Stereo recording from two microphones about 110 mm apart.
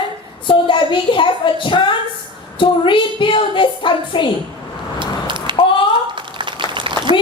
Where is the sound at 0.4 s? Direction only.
50° left (ahead or behind).